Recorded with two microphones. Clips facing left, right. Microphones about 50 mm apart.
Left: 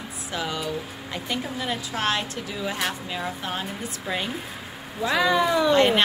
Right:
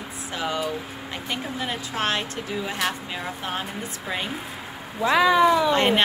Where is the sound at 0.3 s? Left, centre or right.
Right.